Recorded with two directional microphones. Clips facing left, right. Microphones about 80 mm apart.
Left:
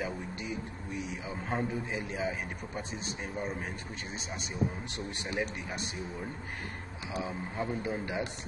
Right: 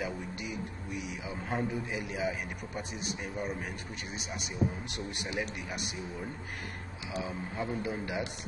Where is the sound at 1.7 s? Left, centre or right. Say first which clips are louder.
Even; left.